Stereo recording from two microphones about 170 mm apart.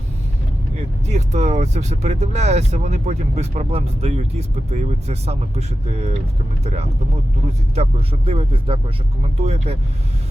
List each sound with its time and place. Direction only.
1.0 s speech: 40° right (ahead or behind)
7.8 s speech: 35° right (ahead or behind)